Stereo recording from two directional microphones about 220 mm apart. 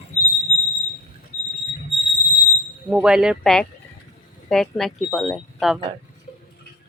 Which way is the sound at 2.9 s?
5° right (ahead or behind).